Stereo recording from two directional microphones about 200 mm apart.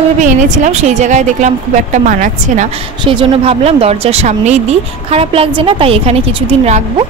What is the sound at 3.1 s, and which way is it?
Speech, 25° right (ahead or behind).